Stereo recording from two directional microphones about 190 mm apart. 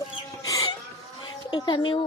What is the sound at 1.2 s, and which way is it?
Speech, 25° left (ahead or behind).